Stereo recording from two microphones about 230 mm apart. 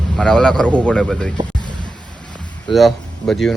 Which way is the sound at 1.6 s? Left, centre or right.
Centre.